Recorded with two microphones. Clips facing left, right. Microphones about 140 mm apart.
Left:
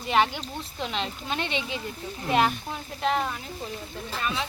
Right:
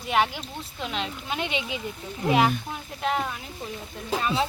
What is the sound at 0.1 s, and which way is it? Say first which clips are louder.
Speech: left 1 dB; 5° right (ahead or behind).